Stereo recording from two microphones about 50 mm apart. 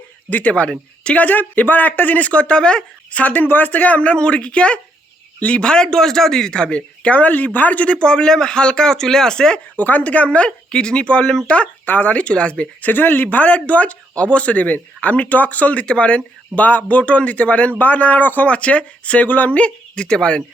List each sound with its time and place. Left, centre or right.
0.3 s speech: left
7.9 s speech: centre
9.7 s speech: left
12.9 s speech: left; by 20.4 s centre